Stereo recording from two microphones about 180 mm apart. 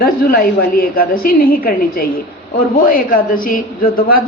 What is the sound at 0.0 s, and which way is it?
A woman's voice, 55° left (ahead or behind).